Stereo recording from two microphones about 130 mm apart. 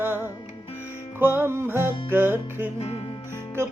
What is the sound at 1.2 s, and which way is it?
Music, 15° right (ahead or behind).